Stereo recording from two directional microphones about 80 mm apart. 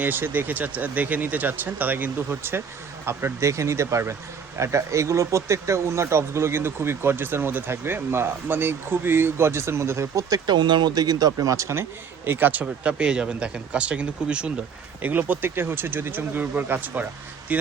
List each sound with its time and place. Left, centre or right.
0.0 s speech: right
10.2 s speech: right
17.5 s a sound: centre